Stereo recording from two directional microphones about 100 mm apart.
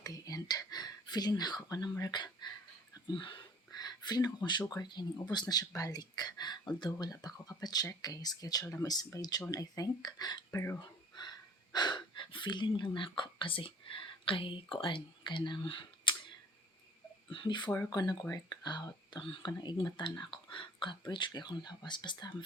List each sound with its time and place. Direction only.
0.0 s speech: 40° left (ahead or behind)
3.1 s speech: 55° left (ahead or behind)
3.7 s a sound: 40° left (ahead or behind)
4.8 s speech: 45° left (ahead or behind)
7.1 s speech: 35° left (ahead or behind)
10.5 s speech: 30° left (ahead or behind)
10.8 s speech: 45° left (ahead or behind)